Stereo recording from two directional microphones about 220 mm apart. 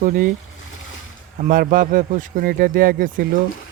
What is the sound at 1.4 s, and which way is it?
Speech, 40° right (ahead or behind).